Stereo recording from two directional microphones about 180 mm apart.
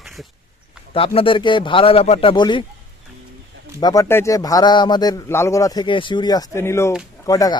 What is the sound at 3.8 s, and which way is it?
Speech, 20° left (ahead or behind).